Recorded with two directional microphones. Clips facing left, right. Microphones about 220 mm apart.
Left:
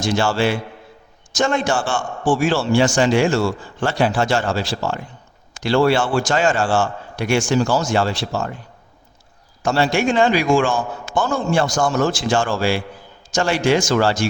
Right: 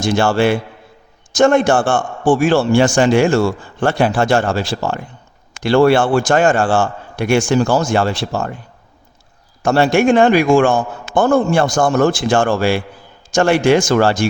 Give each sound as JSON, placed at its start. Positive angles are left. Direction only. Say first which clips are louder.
{"t": 0.0, "sound": "a man's voice", "louder": "right 4 dB", "side_deg": -55}
{"t": 9.6, "sound": "a man's voice", "louder": "right 6 dB", "side_deg": -55}